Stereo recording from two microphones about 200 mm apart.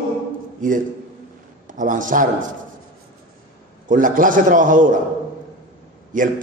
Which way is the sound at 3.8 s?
40° right (ahead or behind).